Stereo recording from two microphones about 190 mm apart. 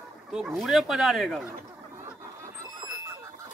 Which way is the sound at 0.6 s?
Centre (ahead or behind).